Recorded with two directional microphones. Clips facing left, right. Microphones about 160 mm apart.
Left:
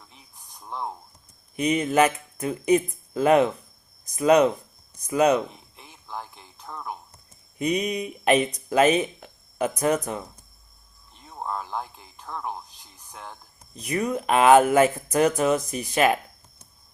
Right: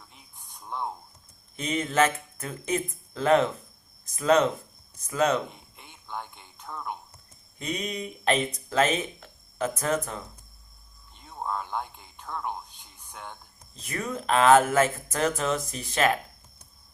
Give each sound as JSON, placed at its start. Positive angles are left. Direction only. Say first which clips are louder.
{"t": 0.4, "sound": "a sound", "louder": "left 1 dB", "side_deg": 0}
{"t": 1.5, "sound": "speech", "louder": "left 4 dB", "side_deg": 15}
{"t": 6.1, "sound": "speech", "louder": "left 1 dB", "side_deg": 0}
{"t": 7.6, "sound": "speech", "louder": "left 7 dB", "side_deg": 15}
{"t": 11.3, "sound": "a sound", "louder": "left 1 dB", "side_deg": 0}
{"t": 13.7, "sound": "speech", "louder": "left 7 dB", "side_deg": 15}